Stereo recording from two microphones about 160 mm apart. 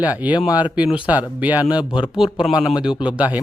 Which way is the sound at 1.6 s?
25° left (ahead or behind).